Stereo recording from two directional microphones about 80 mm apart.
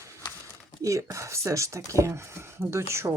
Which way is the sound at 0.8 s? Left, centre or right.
Right.